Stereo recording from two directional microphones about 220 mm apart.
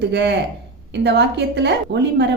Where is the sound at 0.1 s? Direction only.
50° right (ahead or behind).